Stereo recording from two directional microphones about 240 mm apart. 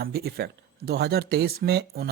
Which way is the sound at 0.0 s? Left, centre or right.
Right.